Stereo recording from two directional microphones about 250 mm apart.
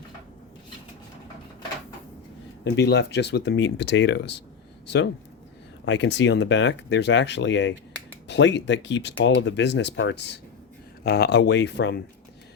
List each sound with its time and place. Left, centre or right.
2.6 s speech: left
5.8 s speech: left